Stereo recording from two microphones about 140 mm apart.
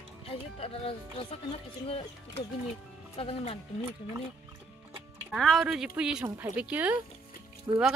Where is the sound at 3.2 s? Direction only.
45° left (ahead or behind).